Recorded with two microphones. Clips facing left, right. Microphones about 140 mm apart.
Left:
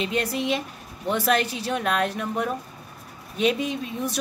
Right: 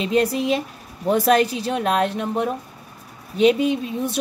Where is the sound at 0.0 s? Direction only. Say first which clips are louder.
Right 6 dB; 35° right (ahead or behind).